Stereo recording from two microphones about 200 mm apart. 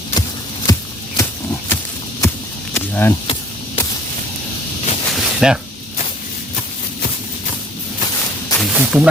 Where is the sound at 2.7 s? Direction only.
10° left (ahead or behind).